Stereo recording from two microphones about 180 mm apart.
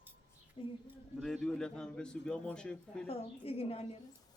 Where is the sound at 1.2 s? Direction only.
Centre (ahead or behind).